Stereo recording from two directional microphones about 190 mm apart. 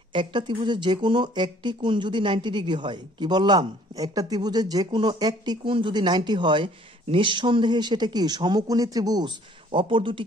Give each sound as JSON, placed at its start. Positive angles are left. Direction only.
{"t": 0.1, "sound": "speech", "side_deg": -25}